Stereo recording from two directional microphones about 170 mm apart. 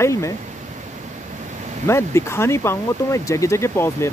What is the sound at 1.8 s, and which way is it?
Speech, 15° left (ahead or behind).